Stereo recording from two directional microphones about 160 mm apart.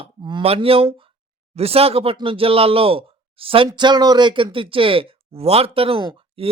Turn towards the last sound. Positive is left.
turn(degrees=-35)  # may be behind; listen again after turning